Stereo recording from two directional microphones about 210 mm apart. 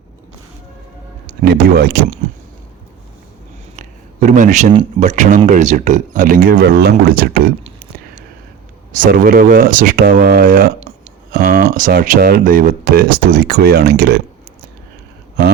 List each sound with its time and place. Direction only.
1.5 s speech: 50° right (ahead or behind)
3.8 s a sound: 35° right (ahead or behind)
4.9 s speech: 35° right (ahead or behind)
8.9 s speech: 40° right (ahead or behind)